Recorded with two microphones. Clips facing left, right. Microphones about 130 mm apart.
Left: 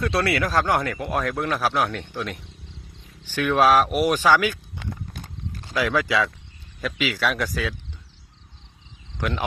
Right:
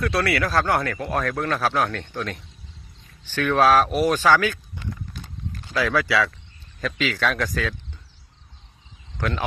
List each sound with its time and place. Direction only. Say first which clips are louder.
0.0 s speech: even; 25° left (ahead or behind)
5.7 s speech: even; 15° left (ahead or behind)
9.2 s speech: even; 15° left (ahead or behind)